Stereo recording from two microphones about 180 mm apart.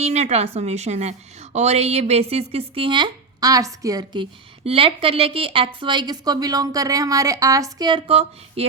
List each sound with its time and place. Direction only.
0.0 s a woman's voice: 35° right (ahead or behind)